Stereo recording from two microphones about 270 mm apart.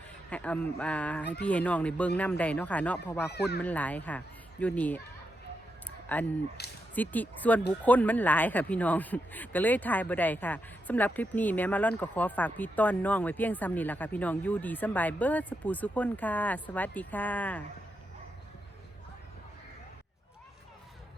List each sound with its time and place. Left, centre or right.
0.3 s speech: centre
1.2 s speech: left
1.5 s speech: centre
6.1 s speech: centre
6.6 s speech: left
6.9 s speech: centre